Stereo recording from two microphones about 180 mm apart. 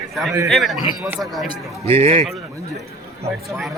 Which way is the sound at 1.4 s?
30° right (ahead or behind).